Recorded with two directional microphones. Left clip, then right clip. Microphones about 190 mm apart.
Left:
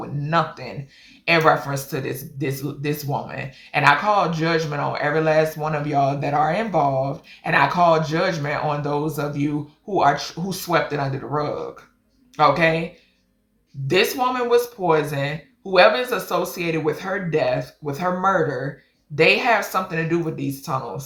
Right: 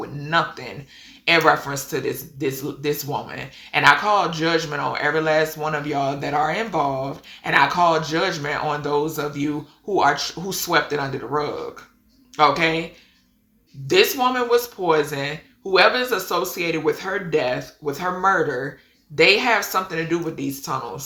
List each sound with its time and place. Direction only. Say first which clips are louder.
0.3 s speech: even; 15° right (ahead or behind)
13.8 s speech: right 2 dB; 15° right (ahead or behind)